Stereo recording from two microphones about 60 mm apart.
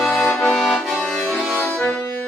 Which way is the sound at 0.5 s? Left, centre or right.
Centre.